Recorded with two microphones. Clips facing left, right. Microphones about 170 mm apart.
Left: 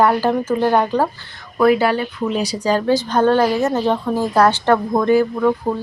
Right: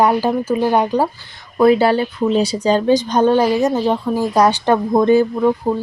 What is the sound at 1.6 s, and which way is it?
A woman's voice, 25° right (ahead or behind).